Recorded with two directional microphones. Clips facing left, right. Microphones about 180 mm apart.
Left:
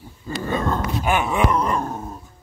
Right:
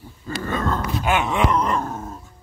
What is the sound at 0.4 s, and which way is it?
Dog, 20° left (ahead or behind).